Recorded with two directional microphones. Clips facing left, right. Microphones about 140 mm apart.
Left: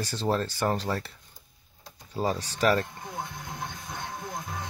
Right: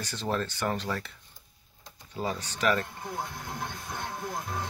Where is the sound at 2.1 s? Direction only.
35° left (ahead or behind).